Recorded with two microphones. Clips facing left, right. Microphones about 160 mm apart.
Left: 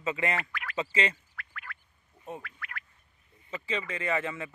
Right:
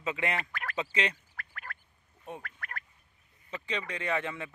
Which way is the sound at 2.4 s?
45° right (ahead or behind).